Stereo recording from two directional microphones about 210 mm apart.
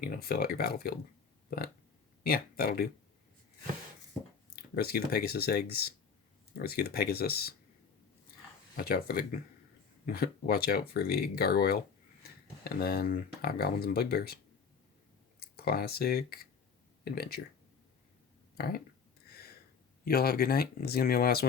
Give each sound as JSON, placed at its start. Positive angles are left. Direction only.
{"t": 0.0, "sound": "speech", "side_deg": 45}
{"t": 1.5, "sound": "burping", "side_deg": 45}
{"t": 2.2, "sound": "speech", "side_deg": 45}
{"t": 4.5, "sound": "speech", "side_deg": 45}
{"t": 8.7, "sound": "speech", "side_deg": 45}
{"t": 15.4, "sound": "speech", "side_deg": 45}
{"t": 18.5, "sound": "a sound", "side_deg": 50}
{"t": 20.1, "sound": "speech", "side_deg": 45}